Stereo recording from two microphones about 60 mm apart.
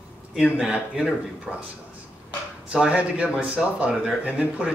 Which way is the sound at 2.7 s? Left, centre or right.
Centre.